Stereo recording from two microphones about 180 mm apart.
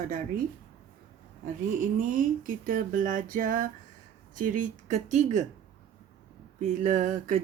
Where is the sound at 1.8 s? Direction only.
45° right (ahead or behind).